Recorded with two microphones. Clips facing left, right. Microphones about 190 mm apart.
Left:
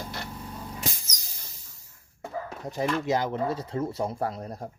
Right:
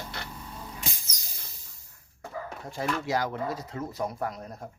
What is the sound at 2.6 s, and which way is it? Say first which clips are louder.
Speech: left 4 dB; 20° left (ahead or behind).